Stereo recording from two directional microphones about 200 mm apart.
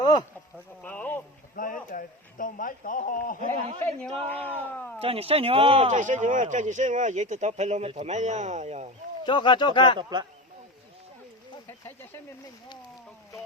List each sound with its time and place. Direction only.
0.0 s a sound: 20° left (ahead or behind)
0.8 s a sound: 10° left (ahead or behind)
1.5 s speech: 45° left (ahead or behind)
4.3 s speech: 10° left (ahead or behind)
4.9 s speech: 30° right (ahead or behind)
9.2 s speech: 25° left (ahead or behind)
10.0 s speech: 20° right (ahead or behind)